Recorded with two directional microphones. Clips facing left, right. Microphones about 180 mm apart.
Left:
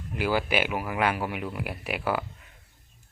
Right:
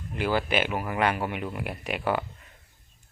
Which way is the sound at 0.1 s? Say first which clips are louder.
Even; 10° left (ahead or behind).